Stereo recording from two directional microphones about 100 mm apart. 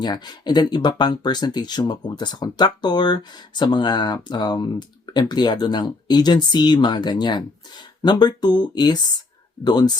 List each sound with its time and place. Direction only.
0.0 s speech: 45° left (ahead or behind)